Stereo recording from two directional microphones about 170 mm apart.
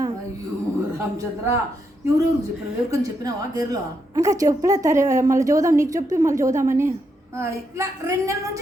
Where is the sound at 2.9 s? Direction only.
20° right (ahead or behind).